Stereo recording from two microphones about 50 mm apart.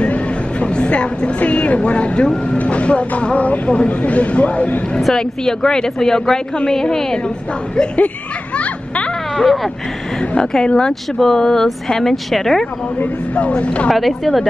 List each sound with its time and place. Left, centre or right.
0.0 s speech: left
5.0 s a woman's voice: centre
8.5 s a sound: left
10.3 s a woman's voice: centre
13.0 s speech: left
13.8 s a woman's voice: centre